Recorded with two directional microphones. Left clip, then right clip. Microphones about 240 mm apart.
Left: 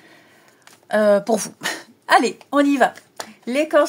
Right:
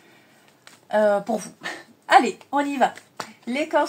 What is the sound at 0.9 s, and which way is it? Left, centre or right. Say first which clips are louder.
Speech: left 4 dB; left.